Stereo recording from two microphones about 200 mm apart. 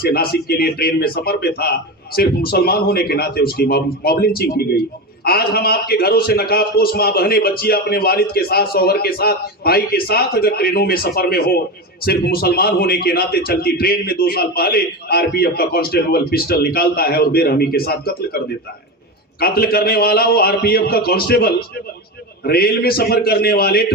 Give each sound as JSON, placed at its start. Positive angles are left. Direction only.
{"t": 0.0, "sound": "a man's voice", "side_deg": 50}
{"t": 19.4, "sound": "a man's voice", "side_deg": 50}